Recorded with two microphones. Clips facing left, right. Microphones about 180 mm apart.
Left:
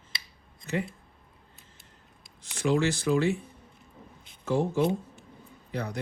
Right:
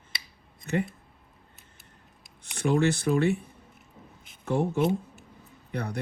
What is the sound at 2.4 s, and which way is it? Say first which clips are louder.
Speech: right 1 dB; 55° right (ahead or behind).